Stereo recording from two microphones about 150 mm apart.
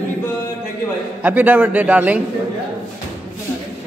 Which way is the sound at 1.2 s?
10° right (ahead or behind).